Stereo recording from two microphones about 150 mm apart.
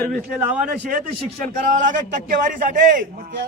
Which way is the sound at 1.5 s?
60° right (ahead or behind).